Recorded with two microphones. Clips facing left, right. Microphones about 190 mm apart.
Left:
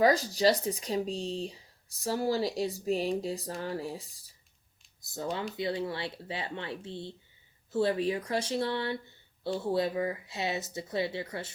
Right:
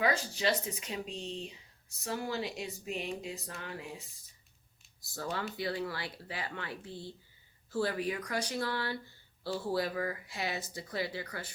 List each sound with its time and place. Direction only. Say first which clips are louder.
0.0 s speech: left 7 dB; 40° left (ahead or behind)
5.1 s speech: left 3 dB; 20° left (ahead or behind)